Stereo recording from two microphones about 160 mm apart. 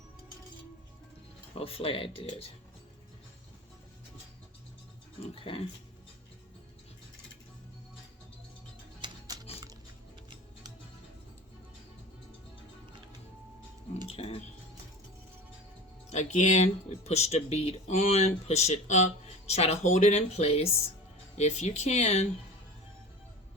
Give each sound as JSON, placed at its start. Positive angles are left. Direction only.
{"t": 1.5, "sound": "speech", "side_deg": 35}
{"t": 5.3, "sound": "speech", "side_deg": 35}
{"t": 9.0, "sound": "music", "side_deg": -25}
{"t": 14.1, "sound": "speech", "side_deg": 40}
{"t": 16.0, "sound": "speech", "side_deg": 45}